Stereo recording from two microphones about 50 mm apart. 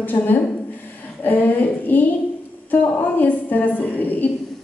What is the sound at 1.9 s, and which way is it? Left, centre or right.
A woman's voice, left.